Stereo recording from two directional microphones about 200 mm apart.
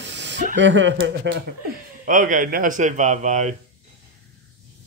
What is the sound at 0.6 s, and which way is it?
Speech, 65° right (ahead or behind).